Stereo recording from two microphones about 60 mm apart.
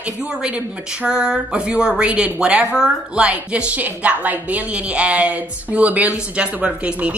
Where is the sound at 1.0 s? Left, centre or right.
Centre.